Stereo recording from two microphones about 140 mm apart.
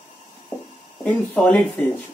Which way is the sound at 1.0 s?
10° left (ahead or behind).